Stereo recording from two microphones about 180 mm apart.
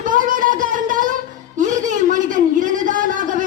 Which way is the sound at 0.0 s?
50° right (ahead or behind).